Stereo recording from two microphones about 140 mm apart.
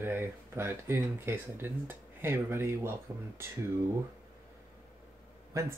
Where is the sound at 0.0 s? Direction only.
15° right (ahead or behind).